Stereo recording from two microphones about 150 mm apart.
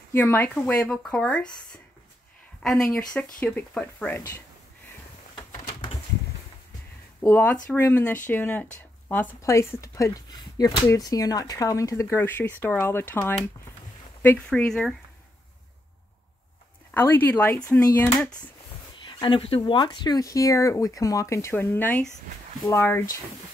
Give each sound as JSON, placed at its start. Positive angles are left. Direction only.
{"t": 0.1, "sound": "speech", "side_deg": 15}
{"t": 2.6, "sound": "speech", "side_deg": 0}
{"t": 7.2, "sound": "speech", "side_deg": 15}
{"t": 16.9, "sound": "speech", "side_deg": 15}
{"t": 19.0, "sound": "speech", "side_deg": 30}